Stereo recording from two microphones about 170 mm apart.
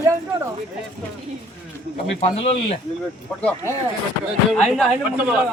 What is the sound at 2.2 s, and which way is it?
Speech, 35° left (ahead or behind).